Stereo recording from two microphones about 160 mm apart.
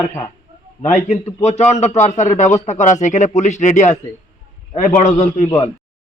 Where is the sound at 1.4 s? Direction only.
45° left (ahead or behind).